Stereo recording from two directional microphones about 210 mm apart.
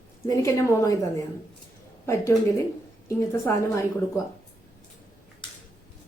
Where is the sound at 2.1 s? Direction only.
15° left (ahead or behind).